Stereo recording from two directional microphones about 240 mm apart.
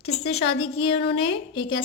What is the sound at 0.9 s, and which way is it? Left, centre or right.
Speech, left.